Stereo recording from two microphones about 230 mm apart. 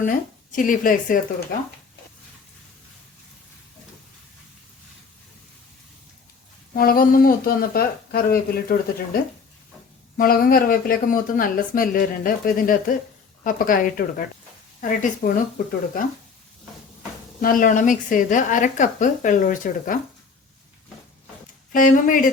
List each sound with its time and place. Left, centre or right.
0.0 s speech: left
6.7 s speech: left
10.2 s speech: left
17.4 s speech: left
21.7 s speech: left